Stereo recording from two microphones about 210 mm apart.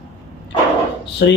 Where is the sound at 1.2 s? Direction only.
55° left (ahead or behind).